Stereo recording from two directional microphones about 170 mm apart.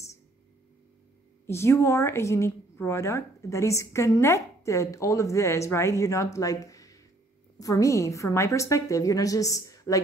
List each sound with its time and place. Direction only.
1.4 s a woman's voice: 15° left (ahead or behind)